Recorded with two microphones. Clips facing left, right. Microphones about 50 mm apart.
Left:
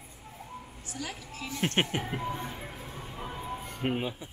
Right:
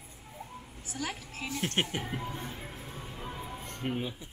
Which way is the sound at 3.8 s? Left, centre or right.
Centre.